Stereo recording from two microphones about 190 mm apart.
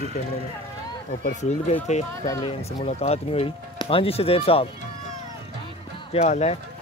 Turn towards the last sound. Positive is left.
turn(degrees=35)  # may be behind; listen again after turning